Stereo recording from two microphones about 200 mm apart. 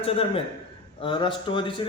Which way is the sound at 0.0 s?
30° left (ahead or behind).